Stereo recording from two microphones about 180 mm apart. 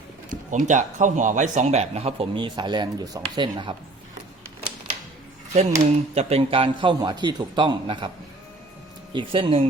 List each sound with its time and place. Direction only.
0.3 s speech: 40° right (ahead or behind); by 3.8 s 25° right (ahead or behind)
5.5 s speech: 40° right (ahead or behind)
9.1 s speech: 30° right (ahead or behind)